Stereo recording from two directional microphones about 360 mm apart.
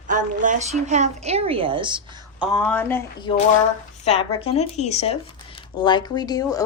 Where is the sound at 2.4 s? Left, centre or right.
Centre.